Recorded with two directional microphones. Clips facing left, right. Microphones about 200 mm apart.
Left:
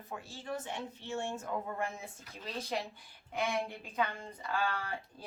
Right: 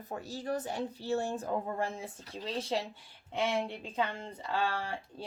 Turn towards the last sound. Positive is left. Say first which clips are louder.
# right 2 dB
turn(degrees=-30)  # may be behind; listen again after turning